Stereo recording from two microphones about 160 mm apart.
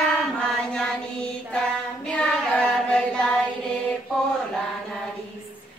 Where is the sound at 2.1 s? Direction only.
5° left (ahead or behind).